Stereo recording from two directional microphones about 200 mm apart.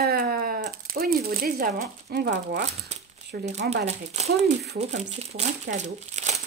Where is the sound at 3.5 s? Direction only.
35° right (ahead or behind).